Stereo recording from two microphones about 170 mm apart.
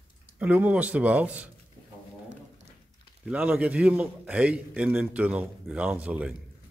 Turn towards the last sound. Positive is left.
turn(degrees=-10)  # may be behind; listen again after turning